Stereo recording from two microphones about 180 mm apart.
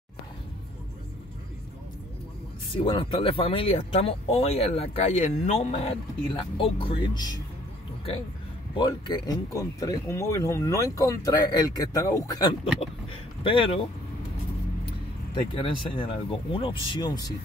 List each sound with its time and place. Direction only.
2.8 s speech: 30° left (ahead or behind)
8.7 s speech: 25° left (ahead or behind)
13.1 s a sound: 30° left (ahead or behind)
15.5 s speech: 30° left (ahead or behind)